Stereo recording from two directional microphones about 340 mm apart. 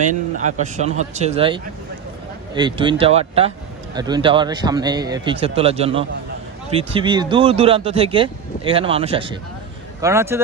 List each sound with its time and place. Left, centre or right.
0.1 s speech: right